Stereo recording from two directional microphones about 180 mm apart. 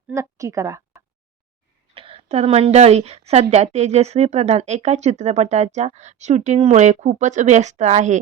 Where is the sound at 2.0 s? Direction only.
30° right (ahead or behind).